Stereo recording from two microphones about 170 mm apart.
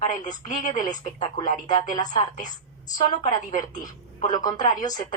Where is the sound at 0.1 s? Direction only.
25° left (ahead or behind).